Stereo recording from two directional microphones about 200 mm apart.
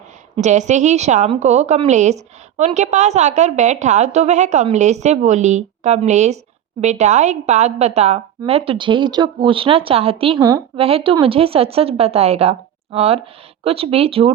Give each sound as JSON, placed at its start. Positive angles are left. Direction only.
{"t": 0.3, "sound": "a woman's voice", "side_deg": -35}